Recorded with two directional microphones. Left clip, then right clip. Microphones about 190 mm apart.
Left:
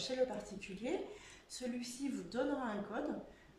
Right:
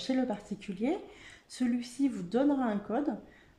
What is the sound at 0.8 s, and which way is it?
Speech, 45° right (ahead or behind).